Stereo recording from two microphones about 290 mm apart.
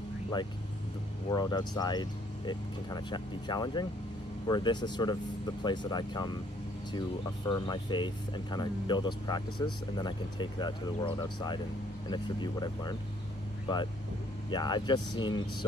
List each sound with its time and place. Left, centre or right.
1.3 s speech: centre
14.5 s speech: centre